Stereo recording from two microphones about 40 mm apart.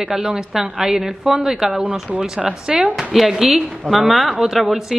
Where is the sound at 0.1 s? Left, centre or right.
Centre.